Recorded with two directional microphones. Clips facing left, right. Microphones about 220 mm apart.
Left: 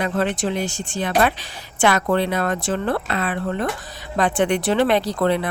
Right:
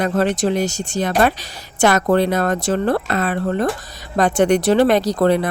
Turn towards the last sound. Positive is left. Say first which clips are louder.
# right 4 dB
turn(degrees=-40)  # may be behind; listen again after turning